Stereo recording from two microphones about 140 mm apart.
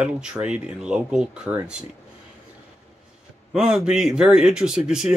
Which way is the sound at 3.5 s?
5° right (ahead or behind).